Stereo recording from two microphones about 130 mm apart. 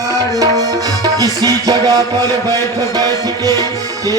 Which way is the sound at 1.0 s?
30° right (ahead or behind).